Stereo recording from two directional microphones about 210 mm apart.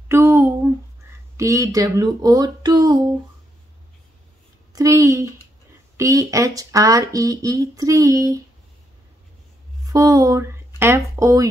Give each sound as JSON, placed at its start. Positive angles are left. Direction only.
{"t": 0.1, "sound": "a sound", "side_deg": -10}
{"t": 1.3, "sound": "speech", "side_deg": -15}
{"t": 4.7, "sound": "speech", "side_deg": -15}
{"t": 9.8, "sound": "speech", "side_deg": -15}